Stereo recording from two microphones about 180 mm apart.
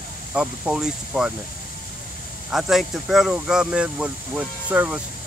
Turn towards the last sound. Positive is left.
turn(degrees=-10)  # may be behind; listen again after turning